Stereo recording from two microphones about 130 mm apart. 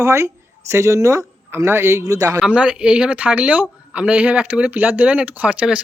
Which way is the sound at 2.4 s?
10° right (ahead or behind).